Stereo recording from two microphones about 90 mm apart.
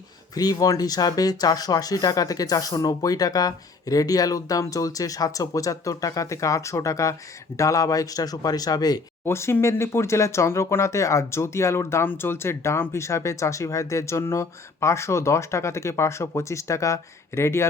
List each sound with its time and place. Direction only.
0.3 s speech: 45° left (ahead or behind)
9.2 s speech: 30° left (ahead or behind)